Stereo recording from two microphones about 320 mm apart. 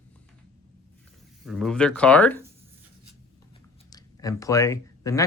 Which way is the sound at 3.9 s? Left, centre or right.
Centre.